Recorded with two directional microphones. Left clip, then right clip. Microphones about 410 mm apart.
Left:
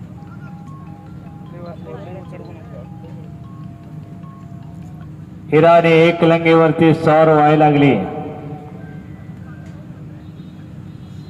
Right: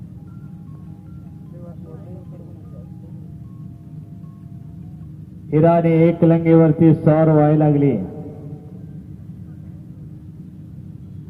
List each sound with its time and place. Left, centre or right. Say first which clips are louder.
5.5 s mantra: left 5 dB; left